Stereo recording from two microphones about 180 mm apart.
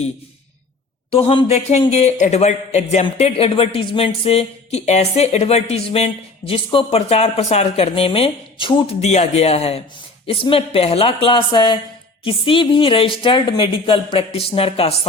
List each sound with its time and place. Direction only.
1.1 s a woman's voice: 30° left (ahead or behind)